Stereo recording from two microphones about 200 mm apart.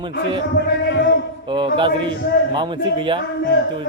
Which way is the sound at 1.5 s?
25° right (ahead or behind).